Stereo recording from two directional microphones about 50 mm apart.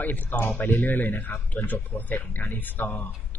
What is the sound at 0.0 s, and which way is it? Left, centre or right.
A man's voice, left.